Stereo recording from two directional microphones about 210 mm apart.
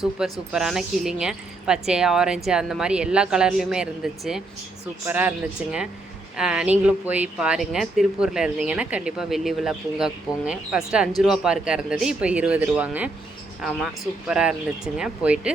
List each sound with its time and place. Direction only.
0.0 s speech: 5° right (ahead or behind)
6.3 s speech: 5° right (ahead or behind)